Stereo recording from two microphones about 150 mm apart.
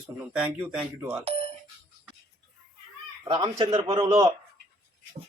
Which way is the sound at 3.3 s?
30° right (ahead or behind).